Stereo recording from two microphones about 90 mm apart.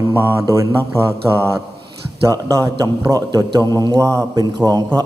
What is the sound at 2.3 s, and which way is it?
A man's voice, 40° right (ahead or behind).